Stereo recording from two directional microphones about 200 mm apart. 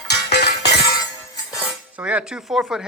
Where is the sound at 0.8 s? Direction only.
20° left (ahead or behind).